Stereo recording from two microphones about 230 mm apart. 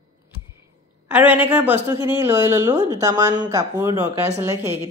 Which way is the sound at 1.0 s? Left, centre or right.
Centre.